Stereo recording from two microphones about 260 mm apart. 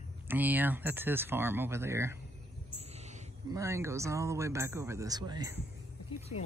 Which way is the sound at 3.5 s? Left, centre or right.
Centre.